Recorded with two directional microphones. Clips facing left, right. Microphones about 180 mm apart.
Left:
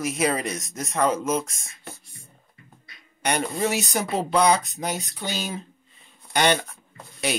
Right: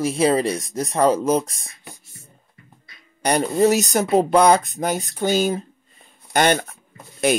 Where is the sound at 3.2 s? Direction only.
35° right (ahead or behind).